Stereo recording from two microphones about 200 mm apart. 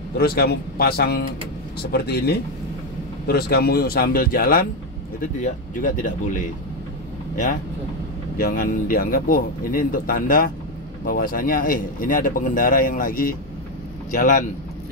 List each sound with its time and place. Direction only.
0.2 s speech: 50° left (ahead or behind)
8.4 s speech: 45° left (ahead or behind)